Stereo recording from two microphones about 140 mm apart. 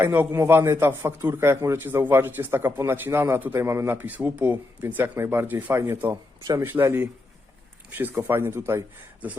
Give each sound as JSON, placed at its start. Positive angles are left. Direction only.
{"t": 0.0, "sound": "a man's voice", "side_deg": -15}